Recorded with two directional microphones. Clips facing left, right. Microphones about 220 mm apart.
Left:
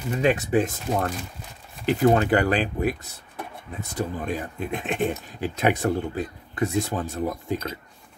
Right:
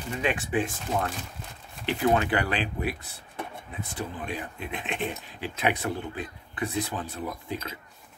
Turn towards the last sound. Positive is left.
turn(degrees=45)  # may be behind; listen again after turning